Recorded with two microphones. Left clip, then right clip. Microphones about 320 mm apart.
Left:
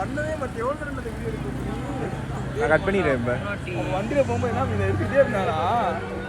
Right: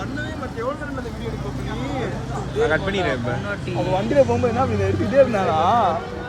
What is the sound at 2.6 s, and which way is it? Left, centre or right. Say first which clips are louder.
Speech: even; centre.